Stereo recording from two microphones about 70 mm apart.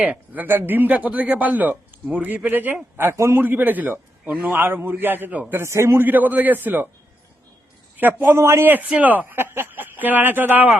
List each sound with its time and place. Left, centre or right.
0.0 s speech: right
2.9 s a man's voice: right
3.4 s speech: right
5.5 s a man's voice: right
6.1 s speech: right
7.9 s a man's voice: right
9.0 s speech: right